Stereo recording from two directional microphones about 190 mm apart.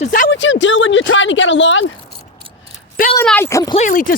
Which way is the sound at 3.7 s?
40° left (ahead or behind).